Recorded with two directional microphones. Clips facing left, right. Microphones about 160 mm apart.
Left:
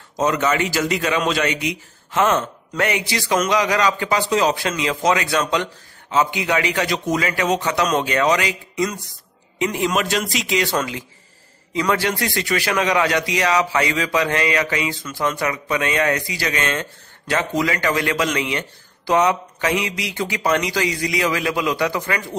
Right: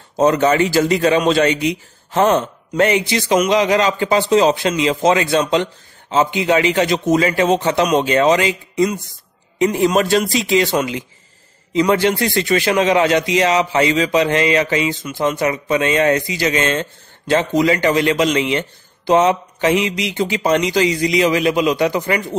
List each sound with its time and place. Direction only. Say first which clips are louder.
0.1 s a man's voice: right 6 dB; 30° right (ahead or behind)
9.6 s a man's voice: right 6 dB; 35° right (ahead or behind)
10.7 s a man's voice: right 4 dB; 20° right (ahead or behind)